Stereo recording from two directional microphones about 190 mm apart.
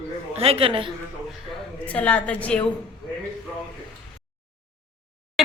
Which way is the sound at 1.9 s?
5° left (ahead or behind).